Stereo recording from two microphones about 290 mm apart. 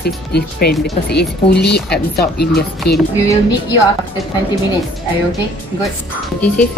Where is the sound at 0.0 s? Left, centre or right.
Left.